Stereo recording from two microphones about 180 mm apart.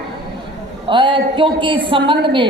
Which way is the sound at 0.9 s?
25° right (ahead or behind).